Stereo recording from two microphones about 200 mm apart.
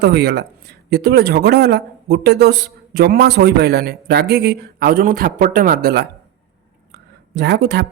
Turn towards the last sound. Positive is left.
turn(degrees=-55)  # may be behind; listen again after turning